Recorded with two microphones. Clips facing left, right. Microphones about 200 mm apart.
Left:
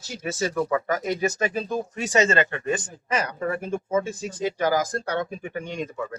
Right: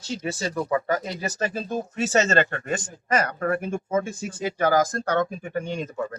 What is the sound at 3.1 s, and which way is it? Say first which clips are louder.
Speech: right 2 dB; 55° right (ahead or behind).